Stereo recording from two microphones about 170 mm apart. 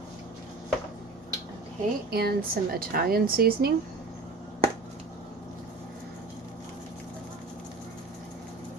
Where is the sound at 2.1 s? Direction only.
65° right (ahead or behind).